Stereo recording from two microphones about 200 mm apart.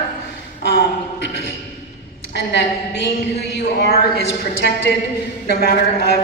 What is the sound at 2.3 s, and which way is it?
Speech, 60° left (ahead or behind).